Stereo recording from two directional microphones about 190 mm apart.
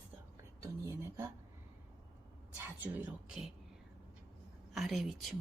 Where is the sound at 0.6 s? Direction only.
15° right (ahead or behind).